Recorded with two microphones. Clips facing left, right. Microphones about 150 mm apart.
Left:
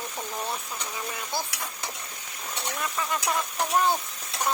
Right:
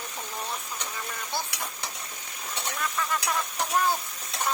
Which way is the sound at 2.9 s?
15° left (ahead or behind).